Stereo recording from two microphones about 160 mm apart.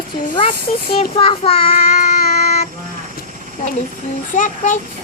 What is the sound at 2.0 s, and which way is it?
Baby cry, 70° left (ahead or behind).